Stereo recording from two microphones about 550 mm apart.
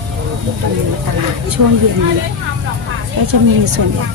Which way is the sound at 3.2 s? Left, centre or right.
Right.